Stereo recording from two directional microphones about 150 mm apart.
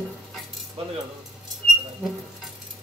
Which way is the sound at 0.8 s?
40° right (ahead or behind).